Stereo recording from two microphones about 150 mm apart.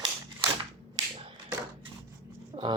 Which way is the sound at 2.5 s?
35° right (ahead or behind).